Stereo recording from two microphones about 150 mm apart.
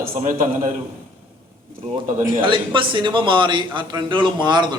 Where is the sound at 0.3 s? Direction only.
60° right (ahead or behind).